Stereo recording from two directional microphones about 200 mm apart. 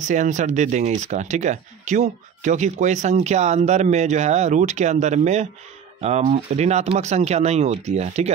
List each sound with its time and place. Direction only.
0.0 s speech: 40° right (ahead or behind)